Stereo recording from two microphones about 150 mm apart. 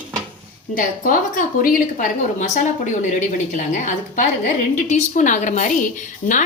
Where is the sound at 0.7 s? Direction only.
65° left (ahead or behind).